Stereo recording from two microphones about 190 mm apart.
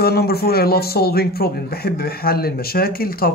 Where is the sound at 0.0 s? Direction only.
55° left (ahead or behind).